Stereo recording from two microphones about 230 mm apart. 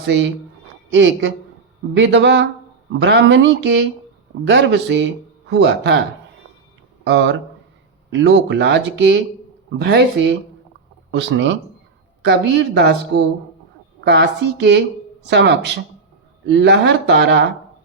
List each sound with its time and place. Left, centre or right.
0.9 s speech: right
7.0 s speech: right
14.0 s speech: right